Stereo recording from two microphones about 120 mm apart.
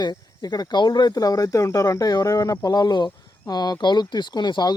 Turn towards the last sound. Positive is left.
turn(degrees=35)  # may be behind; listen again after turning